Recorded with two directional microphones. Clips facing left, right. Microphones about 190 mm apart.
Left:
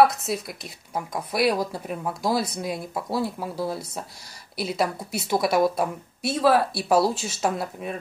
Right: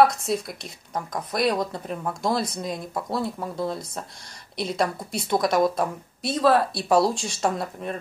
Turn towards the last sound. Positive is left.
turn(degrees=5)  # may be behind; listen again after turning